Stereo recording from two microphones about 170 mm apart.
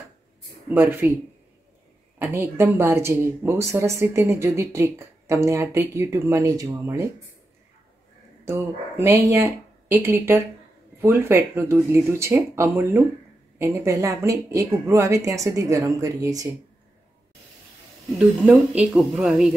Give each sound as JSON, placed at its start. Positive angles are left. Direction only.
{"t": 0.7, "sound": "speech", "side_deg": -10}
{"t": 2.1, "sound": "speech", "side_deg": -10}
{"t": 8.5, "sound": "a woman's voice", "side_deg": -15}
{"t": 18.2, "sound": "a woman's voice", "side_deg": -10}